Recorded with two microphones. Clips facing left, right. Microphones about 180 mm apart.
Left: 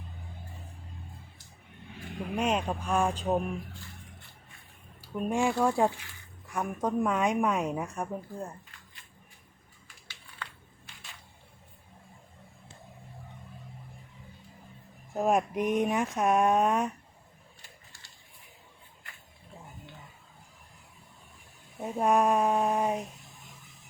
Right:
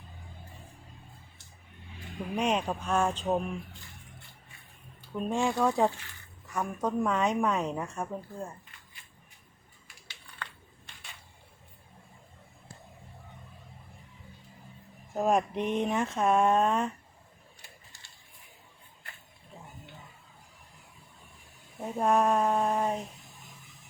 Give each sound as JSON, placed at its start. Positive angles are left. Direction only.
{"t": 2.3, "sound": "a woman's voice", "side_deg": 5}
{"t": 5.1, "sound": "a woman's voice", "side_deg": 10}
{"t": 10.4, "sound": "a sound", "side_deg": 5}
{"t": 15.1, "sound": "a woman's voice", "side_deg": 5}
{"t": 21.8, "sound": "speech", "side_deg": 5}